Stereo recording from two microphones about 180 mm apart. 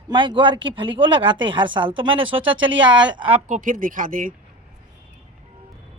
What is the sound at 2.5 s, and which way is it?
Speech, 90° right.